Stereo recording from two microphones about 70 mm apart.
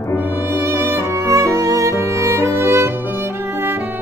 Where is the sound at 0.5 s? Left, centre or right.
Right.